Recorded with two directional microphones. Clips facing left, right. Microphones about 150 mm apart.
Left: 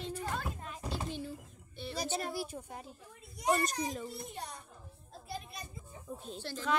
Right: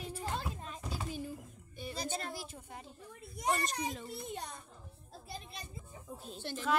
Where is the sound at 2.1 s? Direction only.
10° left (ahead or behind).